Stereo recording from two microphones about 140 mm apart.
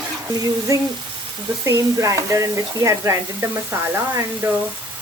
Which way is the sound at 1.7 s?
20° right (ahead or behind).